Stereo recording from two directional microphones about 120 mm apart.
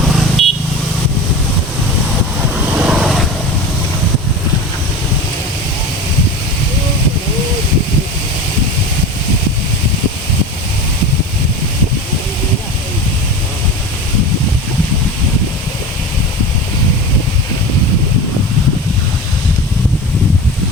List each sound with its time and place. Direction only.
0.0 s vehicle: 5° right (ahead or behind)
2.7 s vehicle: 10° right (ahead or behind)